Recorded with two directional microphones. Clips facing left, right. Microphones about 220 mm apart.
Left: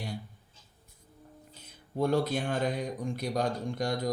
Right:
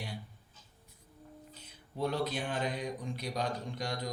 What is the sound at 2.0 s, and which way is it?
Speech, 45° left (ahead or behind).